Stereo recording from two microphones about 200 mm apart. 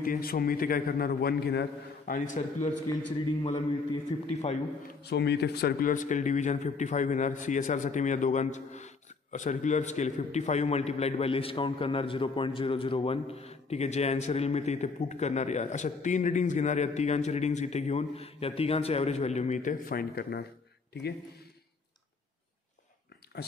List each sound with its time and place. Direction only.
0.0 s a man's voice: 45° left (ahead or behind)
2.1 s a man's voice: 40° left (ahead or behind)
3.4 s a man's voice: 25° left (ahead or behind)
5.0 s a man's voice: 55° left (ahead or behind)
23.3 s speech: 55° left (ahead or behind)